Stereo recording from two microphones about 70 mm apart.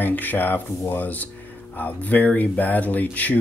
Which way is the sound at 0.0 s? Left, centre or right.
Left.